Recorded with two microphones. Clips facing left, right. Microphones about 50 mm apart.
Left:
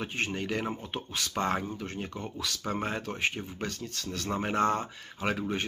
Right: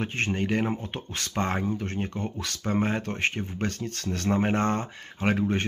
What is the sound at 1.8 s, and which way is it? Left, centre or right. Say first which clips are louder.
Speech: right 6 dB; right.